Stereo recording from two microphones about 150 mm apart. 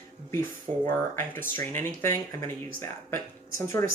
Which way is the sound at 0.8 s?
15° left (ahead or behind).